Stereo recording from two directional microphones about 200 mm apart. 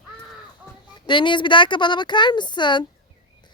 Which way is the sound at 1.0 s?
25° left (ahead or behind).